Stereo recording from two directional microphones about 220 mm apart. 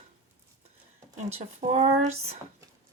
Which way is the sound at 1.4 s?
30° right (ahead or behind).